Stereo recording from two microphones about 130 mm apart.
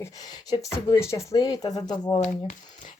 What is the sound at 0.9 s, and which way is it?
Speech, 20° left (ahead or behind).